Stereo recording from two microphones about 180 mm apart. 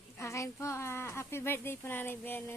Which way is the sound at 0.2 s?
15° left (ahead or behind).